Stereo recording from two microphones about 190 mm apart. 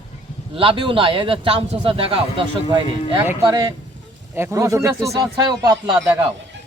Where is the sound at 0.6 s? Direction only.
25° right (ahead or behind).